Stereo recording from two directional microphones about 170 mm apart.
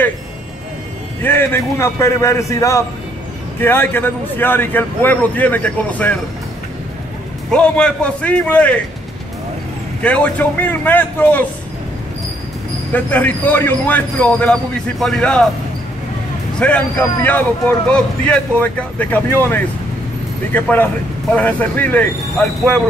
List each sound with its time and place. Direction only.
1.2 s a man's voice: 15° left (ahead or behind)
7.5 s a man's voice: 5° left (ahead or behind)
10.0 s a man's voice: 10° left (ahead or behind)
12.9 s a man's voice: 10° left (ahead or behind)
16.5 s a man's voice: 10° left (ahead or behind)